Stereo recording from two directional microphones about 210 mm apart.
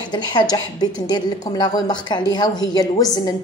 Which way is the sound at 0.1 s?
20° left (ahead or behind).